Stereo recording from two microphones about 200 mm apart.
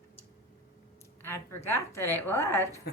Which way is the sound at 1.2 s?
10° left (ahead or behind).